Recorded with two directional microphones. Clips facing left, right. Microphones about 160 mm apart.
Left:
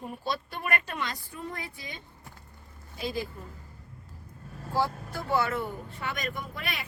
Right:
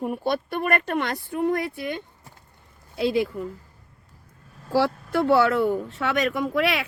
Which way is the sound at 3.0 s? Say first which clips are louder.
Right 11 dB; 80° right.